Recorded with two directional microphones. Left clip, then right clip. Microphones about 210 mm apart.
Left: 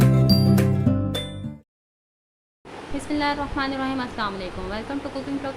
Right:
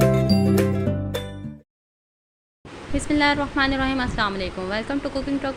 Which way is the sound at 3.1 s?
20° right (ahead or behind).